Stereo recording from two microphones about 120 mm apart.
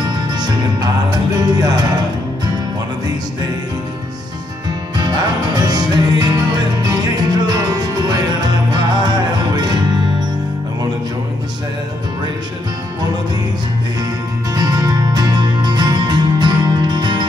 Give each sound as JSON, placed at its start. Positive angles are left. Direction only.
{"t": 0.3, "sound": "music", "side_deg": -35}
{"t": 4.9, "sound": "music", "side_deg": -35}
{"t": 14.5, "sound": "music", "side_deg": -30}